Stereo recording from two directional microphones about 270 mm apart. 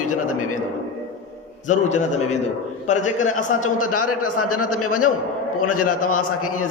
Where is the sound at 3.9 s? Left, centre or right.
Left.